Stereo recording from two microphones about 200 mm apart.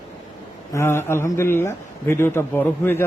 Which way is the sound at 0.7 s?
15° left (ahead or behind).